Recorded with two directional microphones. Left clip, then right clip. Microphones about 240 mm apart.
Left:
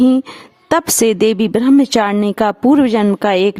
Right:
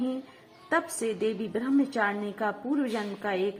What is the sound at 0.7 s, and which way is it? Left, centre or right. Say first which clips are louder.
A woman's voice: left 15 dB; left.